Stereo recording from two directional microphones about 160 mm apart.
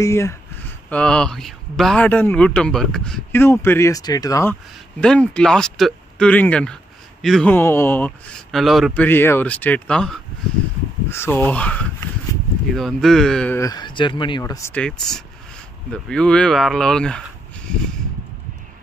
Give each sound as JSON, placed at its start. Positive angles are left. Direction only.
{"t": 0.0, "sound": "a man's voice", "side_deg": 15}
{"t": 0.8, "sound": "a man's voice", "side_deg": 5}
{"t": 5.0, "sound": "speech", "side_deg": 5}
{"t": 7.5, "sound": "a man's voice", "side_deg": 15}
{"t": 8.5, "sound": "speech", "side_deg": 0}
{"t": 9.0, "sound": "a man's voice", "side_deg": 15}
{"t": 13.6, "sound": "speech", "side_deg": 25}
{"t": 14.4, "sound": "a man's voice", "side_deg": 20}
{"t": 14.8, "sound": "speech", "side_deg": 5}